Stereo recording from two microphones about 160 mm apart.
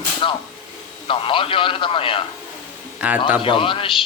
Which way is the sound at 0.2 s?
30° left (ahead or behind).